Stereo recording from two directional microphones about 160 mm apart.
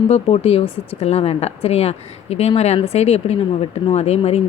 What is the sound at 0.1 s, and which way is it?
Speech, 40° left (ahead or behind).